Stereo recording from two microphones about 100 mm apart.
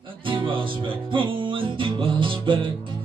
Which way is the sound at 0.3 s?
60° right (ahead or behind).